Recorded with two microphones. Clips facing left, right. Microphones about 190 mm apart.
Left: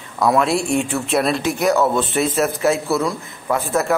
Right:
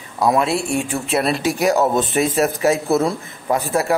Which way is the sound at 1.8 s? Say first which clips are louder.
Right 1 dB; 20° right (ahead or behind).